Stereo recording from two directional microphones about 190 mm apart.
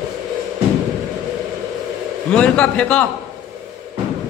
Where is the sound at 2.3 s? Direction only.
5° left (ahead or behind).